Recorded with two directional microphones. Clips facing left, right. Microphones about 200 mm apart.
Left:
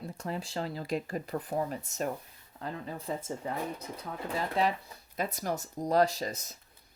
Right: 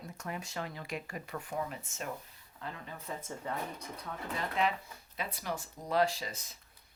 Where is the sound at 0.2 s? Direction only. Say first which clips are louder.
Left 4 dB; 30° left (ahead or behind).